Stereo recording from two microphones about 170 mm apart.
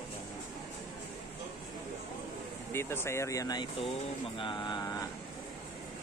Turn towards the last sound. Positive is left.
turn(degrees=25)  # may be behind; listen again after turning